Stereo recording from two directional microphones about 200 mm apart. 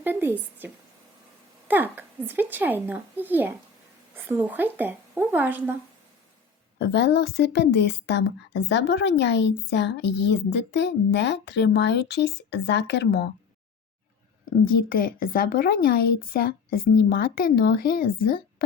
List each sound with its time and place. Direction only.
0.0 s speech: 10° right (ahead or behind)
6.7 s a woman's voice: 60° left (ahead or behind)
14.6 s speech: 45° left (ahead or behind)